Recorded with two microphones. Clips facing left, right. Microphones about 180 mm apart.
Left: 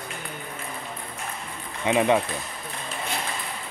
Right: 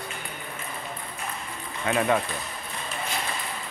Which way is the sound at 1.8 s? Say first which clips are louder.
Left 3 dB; 20° left (ahead or behind).